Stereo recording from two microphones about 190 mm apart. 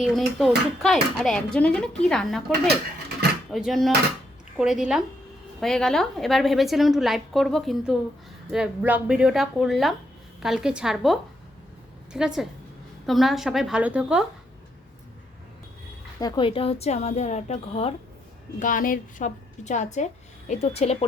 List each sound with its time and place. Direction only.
0.0 s speech: centre (ahead or behind)
3.5 s speech: centre (ahead or behind)
16.2 s a woman's voice: 25° left (ahead or behind)
18.6 s a woman's voice: 45° left (ahead or behind)